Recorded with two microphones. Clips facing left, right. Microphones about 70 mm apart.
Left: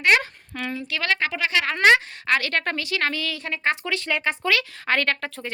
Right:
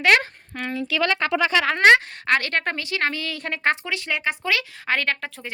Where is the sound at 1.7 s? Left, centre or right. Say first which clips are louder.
Right 1 dB; right.